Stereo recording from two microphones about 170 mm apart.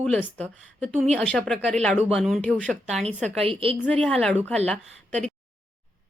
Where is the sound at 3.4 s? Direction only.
35° right (ahead or behind).